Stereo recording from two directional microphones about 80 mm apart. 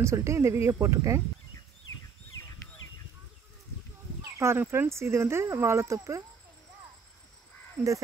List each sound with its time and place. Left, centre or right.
0.0 s speech: right
4.2 s speech: right